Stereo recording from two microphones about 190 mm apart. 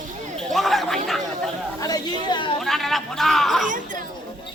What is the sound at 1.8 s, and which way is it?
Chatter, 20° left (ahead or behind).